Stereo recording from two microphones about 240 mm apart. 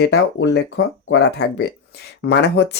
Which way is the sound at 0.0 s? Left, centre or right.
Left.